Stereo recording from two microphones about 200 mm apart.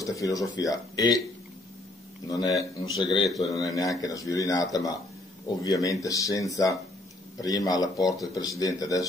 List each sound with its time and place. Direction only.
0.0 s speech: 15° left (ahead or behind)
2.2 s speech: 20° left (ahead or behind)